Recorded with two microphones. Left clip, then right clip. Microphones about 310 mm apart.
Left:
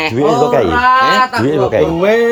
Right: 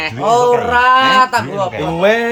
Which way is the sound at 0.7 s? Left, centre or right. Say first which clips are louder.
Even; right.